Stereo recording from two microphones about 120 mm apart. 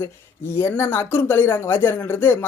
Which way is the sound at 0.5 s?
20° left (ahead or behind).